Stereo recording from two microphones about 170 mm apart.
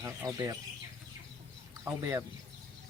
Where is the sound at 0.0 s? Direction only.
20° right (ahead or behind).